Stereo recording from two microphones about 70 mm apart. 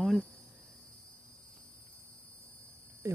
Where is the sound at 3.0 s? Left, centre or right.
Right.